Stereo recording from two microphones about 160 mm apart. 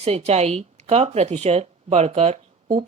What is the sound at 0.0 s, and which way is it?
Speech, 40° right (ahead or behind).